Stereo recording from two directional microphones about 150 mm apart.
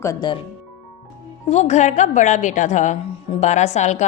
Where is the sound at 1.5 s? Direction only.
50° left (ahead or behind).